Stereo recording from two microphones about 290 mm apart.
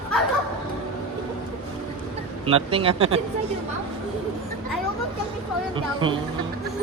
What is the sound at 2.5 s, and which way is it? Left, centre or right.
Speech, centre.